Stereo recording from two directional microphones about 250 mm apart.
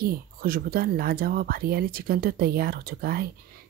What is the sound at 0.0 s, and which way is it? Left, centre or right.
Speech, right.